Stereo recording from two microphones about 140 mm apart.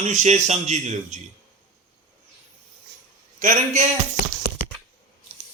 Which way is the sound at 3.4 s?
65° right (ahead or behind).